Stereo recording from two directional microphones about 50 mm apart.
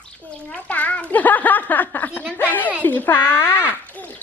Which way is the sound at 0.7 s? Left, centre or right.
Left.